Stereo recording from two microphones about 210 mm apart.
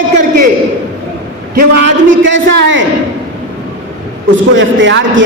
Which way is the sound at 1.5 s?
45° right (ahead or behind).